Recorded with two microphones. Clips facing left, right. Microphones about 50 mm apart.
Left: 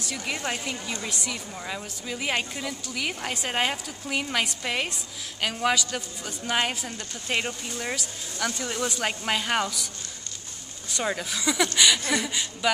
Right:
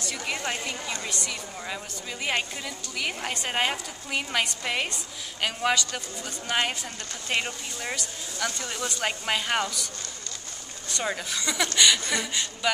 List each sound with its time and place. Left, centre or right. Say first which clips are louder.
0.0 s a woman's voice: even; centre
10.9 s a woman's voice: left 1 dB; centre